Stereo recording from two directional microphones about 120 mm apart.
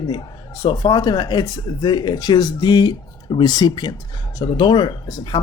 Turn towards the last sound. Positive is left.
turn(degrees=40)  # may be behind; listen again after turning